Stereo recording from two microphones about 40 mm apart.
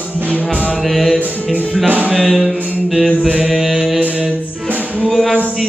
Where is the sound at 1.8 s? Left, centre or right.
Right.